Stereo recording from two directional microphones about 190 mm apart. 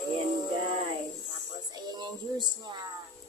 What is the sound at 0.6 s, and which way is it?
Music, 35° right (ahead or behind).